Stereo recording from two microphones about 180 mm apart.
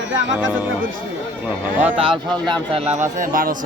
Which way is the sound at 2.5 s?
30° right (ahead or behind).